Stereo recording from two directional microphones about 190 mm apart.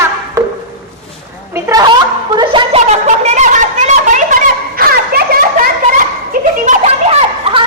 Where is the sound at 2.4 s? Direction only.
25° right (ahead or behind).